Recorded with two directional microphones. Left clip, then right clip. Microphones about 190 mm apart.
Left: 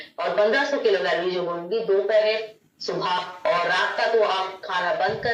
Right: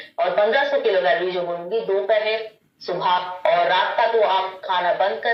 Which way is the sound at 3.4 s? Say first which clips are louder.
Right 3 dB; 20° right (ahead or behind).